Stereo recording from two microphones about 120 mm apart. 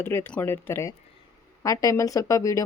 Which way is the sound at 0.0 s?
20° left (ahead or behind).